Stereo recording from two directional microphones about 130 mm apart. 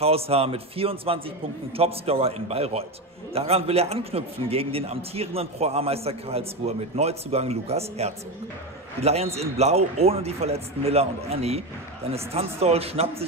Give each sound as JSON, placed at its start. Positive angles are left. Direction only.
{"t": 0.0, "sound": "a man's voice", "side_deg": -50}